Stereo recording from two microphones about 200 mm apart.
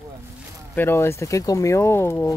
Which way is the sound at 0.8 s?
10° left (ahead or behind).